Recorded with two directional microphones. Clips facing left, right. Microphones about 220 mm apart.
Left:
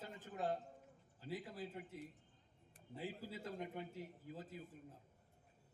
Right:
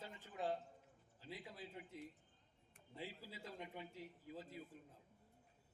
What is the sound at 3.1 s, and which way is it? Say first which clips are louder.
A man's voice: left 6 dB; 50° left (ahead or behind).